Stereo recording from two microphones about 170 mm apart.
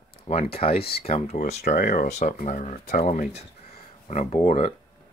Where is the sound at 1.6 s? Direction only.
55° left (ahead or behind).